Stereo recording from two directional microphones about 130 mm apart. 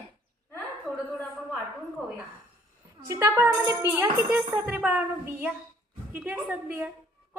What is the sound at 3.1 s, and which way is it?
Speech, 20° right (ahead or behind).